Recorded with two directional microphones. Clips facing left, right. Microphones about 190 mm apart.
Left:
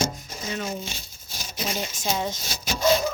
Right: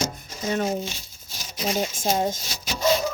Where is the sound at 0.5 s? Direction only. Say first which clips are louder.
Right 6 dB; 50° right (ahead or behind).